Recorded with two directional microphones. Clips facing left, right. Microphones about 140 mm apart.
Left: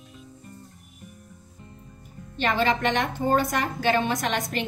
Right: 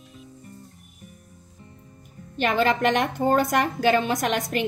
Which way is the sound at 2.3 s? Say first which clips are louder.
Right 2 dB; 50° right (ahead or behind).